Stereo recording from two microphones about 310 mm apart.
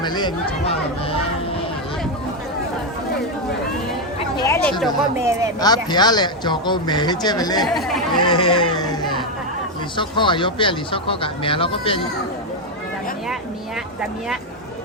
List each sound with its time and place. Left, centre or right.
0.0 s speech: centre
4.4 s a sound: centre
5.2 s speech: centre
5.5 s speech: centre
7.7 s speech: centre
8.2 s speech: centre
10.0 s speech: centre